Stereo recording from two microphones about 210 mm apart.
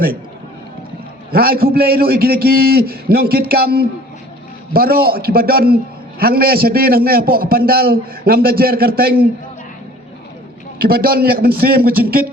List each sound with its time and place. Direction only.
1.3 s a man's voice: 45° right (ahead or behind)
10.8 s a man's voice: 45° right (ahead or behind)